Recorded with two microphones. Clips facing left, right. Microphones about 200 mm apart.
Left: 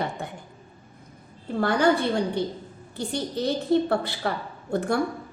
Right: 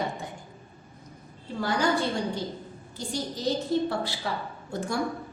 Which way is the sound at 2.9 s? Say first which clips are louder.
Left 5 dB; 60° left (ahead or behind).